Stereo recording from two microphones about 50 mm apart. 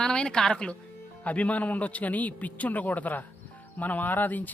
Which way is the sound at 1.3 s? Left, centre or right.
Left.